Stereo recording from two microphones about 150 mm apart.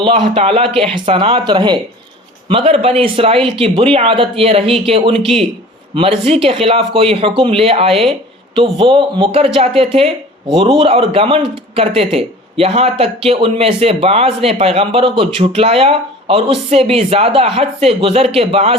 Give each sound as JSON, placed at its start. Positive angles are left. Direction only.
{"t": 0.0, "sound": "a man's voice", "side_deg": -40}